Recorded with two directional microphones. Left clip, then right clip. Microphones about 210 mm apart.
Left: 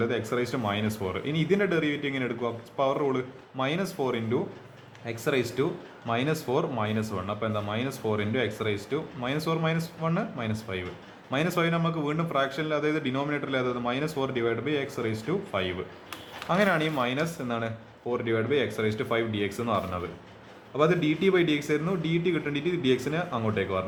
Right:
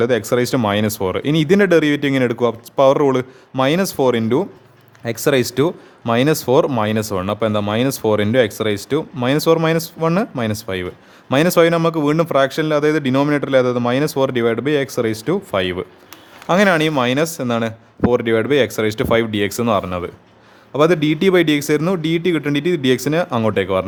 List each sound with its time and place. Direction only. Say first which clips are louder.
0.0 s speech: right 12 dB; 55° right (ahead or behind)